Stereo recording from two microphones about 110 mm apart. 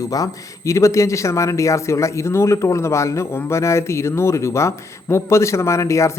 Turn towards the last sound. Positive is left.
turn(degrees=25)  # may be behind; listen again after turning